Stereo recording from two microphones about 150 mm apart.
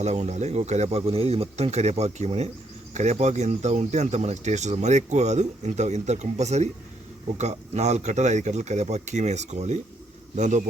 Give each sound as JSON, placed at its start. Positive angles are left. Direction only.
{"t": 0.0, "sound": "speech", "side_deg": -50}